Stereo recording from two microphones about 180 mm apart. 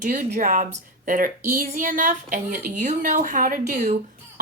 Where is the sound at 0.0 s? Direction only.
50° right (ahead or behind).